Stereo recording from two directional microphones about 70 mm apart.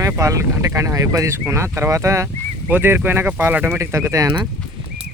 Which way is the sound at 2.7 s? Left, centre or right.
Right.